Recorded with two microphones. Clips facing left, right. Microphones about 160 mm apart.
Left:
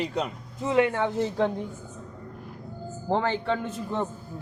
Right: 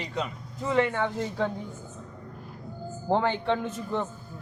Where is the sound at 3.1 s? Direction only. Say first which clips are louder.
Right 1 dB; 5° left (ahead or behind).